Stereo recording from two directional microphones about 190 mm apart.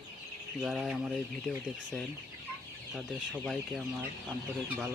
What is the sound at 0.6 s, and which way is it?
Speech, centre (ahead or behind).